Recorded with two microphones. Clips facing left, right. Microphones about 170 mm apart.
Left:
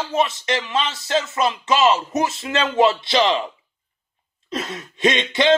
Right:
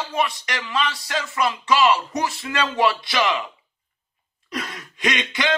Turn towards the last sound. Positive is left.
turn(degrees=25)  # may be behind; listen again after turning